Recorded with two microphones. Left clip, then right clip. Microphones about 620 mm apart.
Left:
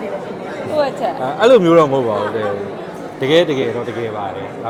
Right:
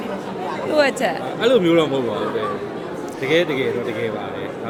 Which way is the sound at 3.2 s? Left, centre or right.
Left.